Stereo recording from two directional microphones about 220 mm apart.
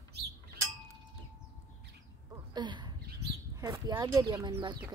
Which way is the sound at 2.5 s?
20° right (ahead or behind).